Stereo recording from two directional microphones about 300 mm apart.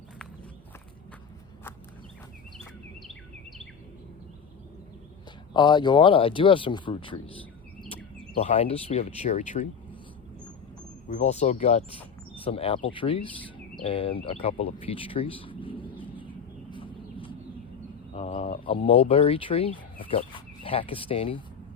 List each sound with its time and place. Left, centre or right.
5.5 s speech: centre
11.1 s speech: left
16.7 s a sound: centre
18.9 s speech: centre